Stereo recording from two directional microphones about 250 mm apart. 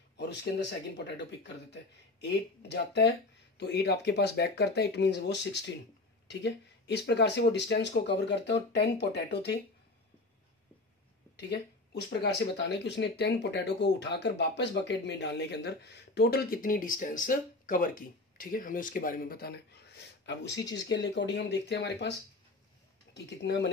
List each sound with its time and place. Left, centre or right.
0.2 s speech: left
11.3 s speech: left
23.1 s speech: left